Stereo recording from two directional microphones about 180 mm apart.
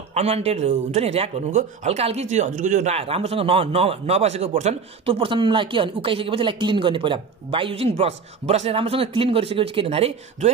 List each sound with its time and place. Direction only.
0.1 s speech: 35° right (ahead or behind)